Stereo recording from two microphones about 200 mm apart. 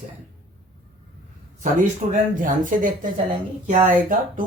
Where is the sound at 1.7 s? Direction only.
40° right (ahead or behind).